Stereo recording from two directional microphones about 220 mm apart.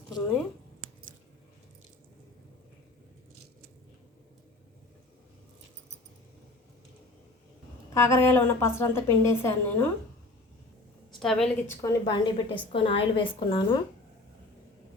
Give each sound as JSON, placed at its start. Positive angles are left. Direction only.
{"t": 7.9, "sound": "a woman's voice", "side_deg": 10}
{"t": 11.1, "sound": "a woman's voice", "side_deg": 0}
{"t": 11.8, "sound": "a woman's voice", "side_deg": 15}